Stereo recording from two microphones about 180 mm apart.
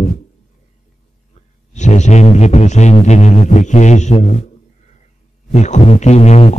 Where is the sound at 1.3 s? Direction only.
40° left (ahead or behind).